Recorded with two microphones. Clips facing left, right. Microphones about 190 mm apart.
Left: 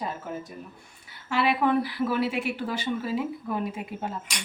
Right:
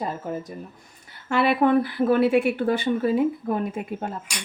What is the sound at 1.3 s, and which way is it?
Speech, 55° right (ahead or behind).